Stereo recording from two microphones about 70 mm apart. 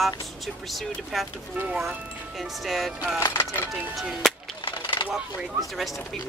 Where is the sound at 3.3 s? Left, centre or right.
Left.